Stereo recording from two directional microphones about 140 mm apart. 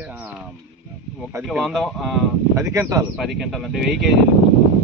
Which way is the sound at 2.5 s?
20° right (ahead or behind).